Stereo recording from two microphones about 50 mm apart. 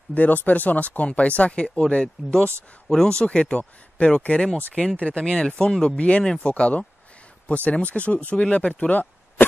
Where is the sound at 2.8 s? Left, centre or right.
Centre.